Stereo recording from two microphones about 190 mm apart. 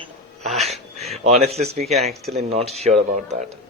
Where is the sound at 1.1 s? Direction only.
35° right (ahead or behind).